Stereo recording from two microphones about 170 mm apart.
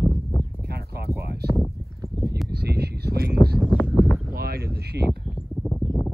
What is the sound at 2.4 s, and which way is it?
Speech, 70° right (ahead or behind).